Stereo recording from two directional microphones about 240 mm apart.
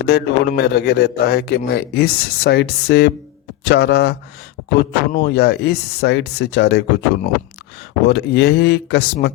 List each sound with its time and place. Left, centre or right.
0.0 s a man's voice: left
8.0 s a man's voice: left